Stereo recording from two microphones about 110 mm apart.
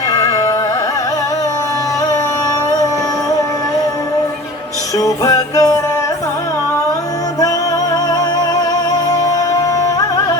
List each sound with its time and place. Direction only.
0.1 s carnatic music: 30° left (ahead or behind)
4.9 s music: 30° left (ahead or behind)
9.2 s music: 30° left (ahead or behind)